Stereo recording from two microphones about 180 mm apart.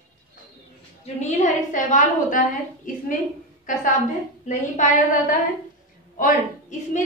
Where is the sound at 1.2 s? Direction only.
40° left (ahead or behind).